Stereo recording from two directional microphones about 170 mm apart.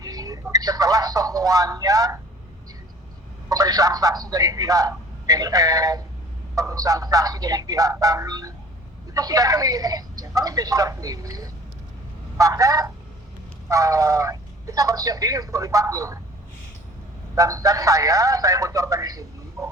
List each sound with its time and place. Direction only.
0.0 s telephone: 20° right (ahead or behind)
3.5 s speech: 20° right (ahead or behind)
17.3 s speech: 20° right (ahead or behind)